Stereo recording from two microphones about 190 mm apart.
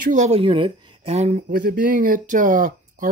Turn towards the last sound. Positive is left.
turn(degrees=-45)  # may be behind; listen again after turning